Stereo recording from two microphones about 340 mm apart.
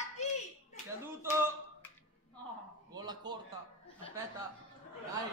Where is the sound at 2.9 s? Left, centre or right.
Centre.